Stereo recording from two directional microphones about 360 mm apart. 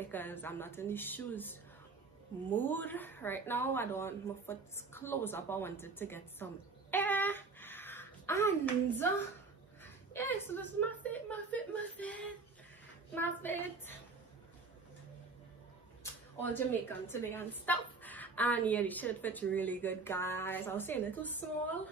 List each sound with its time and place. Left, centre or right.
0.0 s a woman's voice: centre
10.1 s a woman's voice: centre
16.0 s a sound: centre
17.1 s a woman's voice: centre